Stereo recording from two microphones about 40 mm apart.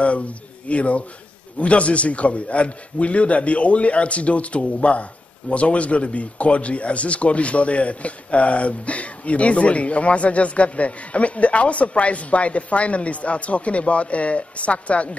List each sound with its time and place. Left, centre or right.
0.7 s speech: left